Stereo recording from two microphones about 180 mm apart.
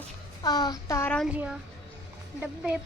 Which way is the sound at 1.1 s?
5° right (ahead or behind).